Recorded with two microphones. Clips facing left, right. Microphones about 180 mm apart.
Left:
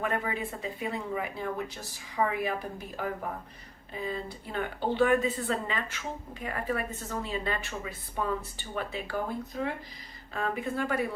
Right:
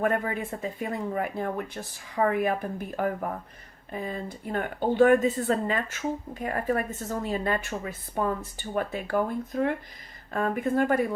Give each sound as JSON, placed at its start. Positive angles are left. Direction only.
{"t": 0.0, "sound": "speech", "side_deg": -50}